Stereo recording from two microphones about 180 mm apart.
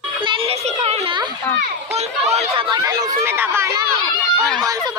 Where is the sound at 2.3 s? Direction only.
30° right (ahead or behind).